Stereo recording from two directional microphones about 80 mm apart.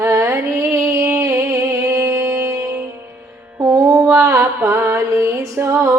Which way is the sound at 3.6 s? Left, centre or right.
Right.